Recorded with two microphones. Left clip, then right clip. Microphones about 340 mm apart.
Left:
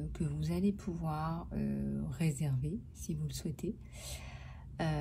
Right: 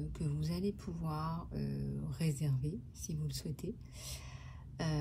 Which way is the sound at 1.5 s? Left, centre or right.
Left.